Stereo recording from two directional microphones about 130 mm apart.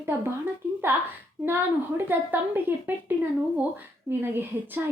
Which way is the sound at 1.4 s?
15° right (ahead or behind).